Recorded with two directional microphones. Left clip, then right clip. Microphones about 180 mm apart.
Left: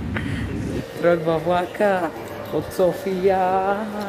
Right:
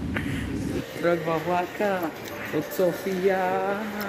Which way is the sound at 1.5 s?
75° left (ahead or behind).